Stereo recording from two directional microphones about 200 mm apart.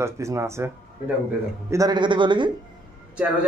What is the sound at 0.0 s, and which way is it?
Speech, 15° right (ahead or behind).